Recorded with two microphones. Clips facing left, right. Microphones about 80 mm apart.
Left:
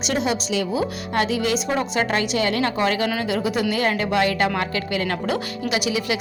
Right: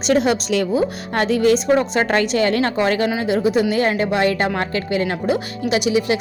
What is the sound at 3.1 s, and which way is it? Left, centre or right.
Speech, right.